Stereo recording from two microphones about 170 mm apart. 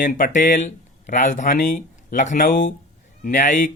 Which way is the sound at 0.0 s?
50° left (ahead or behind).